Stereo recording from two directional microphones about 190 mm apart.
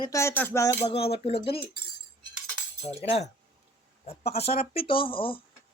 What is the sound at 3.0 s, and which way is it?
Speech, 35° left (ahead or behind).